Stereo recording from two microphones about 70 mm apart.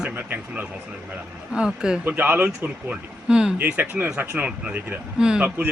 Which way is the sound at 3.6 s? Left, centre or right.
Right.